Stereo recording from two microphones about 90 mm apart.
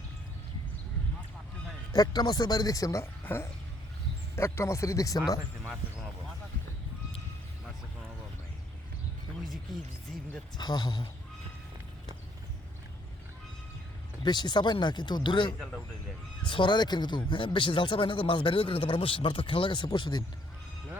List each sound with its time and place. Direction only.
1.9 s speech: 45° left (ahead or behind)
3.0 s speech: 25° left (ahead or behind)
10.6 s speech: 50° left (ahead or behind)
14.3 s speech: 55° left (ahead or behind)